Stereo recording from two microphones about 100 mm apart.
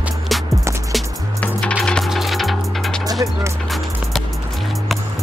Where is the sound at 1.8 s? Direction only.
10° left (ahead or behind).